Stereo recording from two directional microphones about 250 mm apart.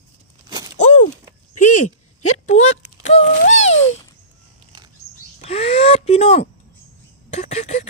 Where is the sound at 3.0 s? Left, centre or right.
Left.